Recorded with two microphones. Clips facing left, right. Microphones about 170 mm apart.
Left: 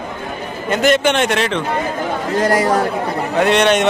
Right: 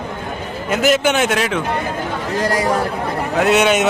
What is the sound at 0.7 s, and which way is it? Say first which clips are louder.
Speech: left 1 dB; 5° right (ahead or behind).